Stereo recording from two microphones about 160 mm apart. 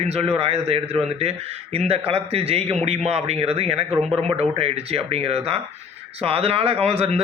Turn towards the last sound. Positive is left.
turn(degrees=-35)  # may be behind; listen again after turning